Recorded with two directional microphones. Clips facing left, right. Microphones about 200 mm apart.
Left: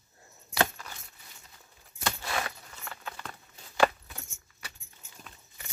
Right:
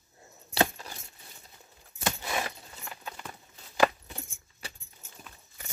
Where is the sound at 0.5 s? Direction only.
25° right (ahead or behind).